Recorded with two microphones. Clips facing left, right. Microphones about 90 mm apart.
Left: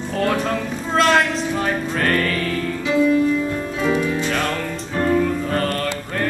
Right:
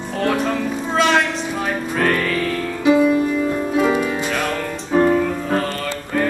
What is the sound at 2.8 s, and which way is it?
Music, 15° right (ahead or behind).